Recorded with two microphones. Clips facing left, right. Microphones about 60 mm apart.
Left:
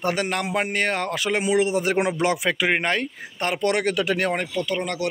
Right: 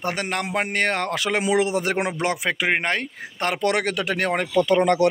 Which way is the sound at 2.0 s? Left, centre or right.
Right.